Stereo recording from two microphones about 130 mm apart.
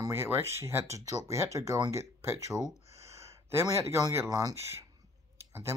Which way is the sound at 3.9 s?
25° right (ahead or behind).